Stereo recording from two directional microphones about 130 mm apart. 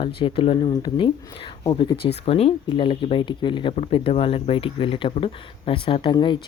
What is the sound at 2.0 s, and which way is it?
Speech, 50° left (ahead or behind).